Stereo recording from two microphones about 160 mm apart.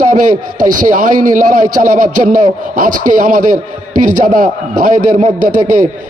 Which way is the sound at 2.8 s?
60° right (ahead or behind).